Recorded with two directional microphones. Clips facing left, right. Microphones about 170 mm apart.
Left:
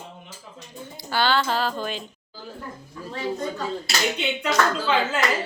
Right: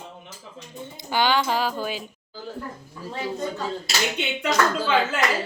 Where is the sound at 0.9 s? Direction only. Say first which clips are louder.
Right 1 dB; 15° right (ahead or behind).